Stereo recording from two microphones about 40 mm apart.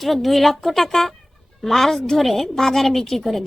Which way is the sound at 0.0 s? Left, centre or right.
Centre.